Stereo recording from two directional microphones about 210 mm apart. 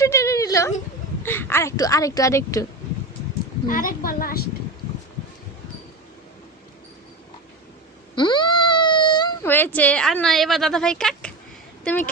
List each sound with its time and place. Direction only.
0.0 s a sound: 15° left (ahead or behind)
1.2 s speech: 10° left (ahead or behind)
3.7 s a woman's voice: 40° left (ahead or behind)
8.1 s speech: 20° left (ahead or behind); by 12.0 s 5° left (ahead or behind)